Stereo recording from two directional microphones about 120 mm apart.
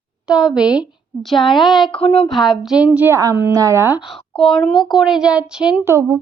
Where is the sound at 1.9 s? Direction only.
50° left (ahead or behind).